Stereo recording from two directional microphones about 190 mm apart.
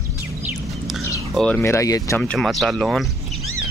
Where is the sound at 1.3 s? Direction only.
5° left (ahead or behind).